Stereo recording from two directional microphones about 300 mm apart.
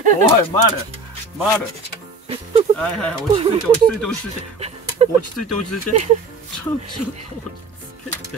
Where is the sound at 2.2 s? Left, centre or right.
Centre.